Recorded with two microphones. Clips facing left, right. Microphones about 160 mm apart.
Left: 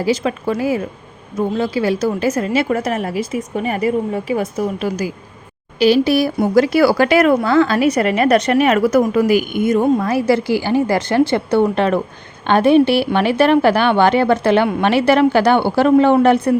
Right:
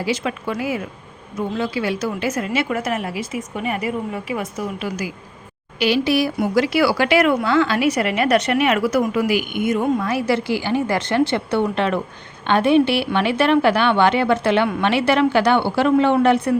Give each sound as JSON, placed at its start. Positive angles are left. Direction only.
{"t": 0.0, "sound": "a woman's voice", "side_deg": 35}